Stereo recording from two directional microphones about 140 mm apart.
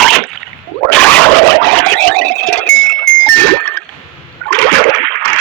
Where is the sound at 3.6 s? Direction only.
10° left (ahead or behind).